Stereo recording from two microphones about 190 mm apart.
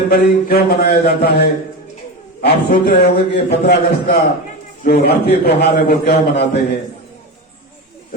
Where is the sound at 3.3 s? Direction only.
60° left (ahead or behind).